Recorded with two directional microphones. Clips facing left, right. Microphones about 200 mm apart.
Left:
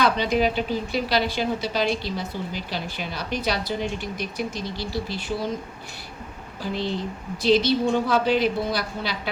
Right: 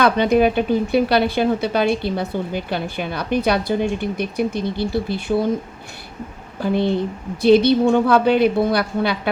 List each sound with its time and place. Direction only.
0.0 s speech: 55° right (ahead or behind)
6.6 s speech: 55° right (ahead or behind)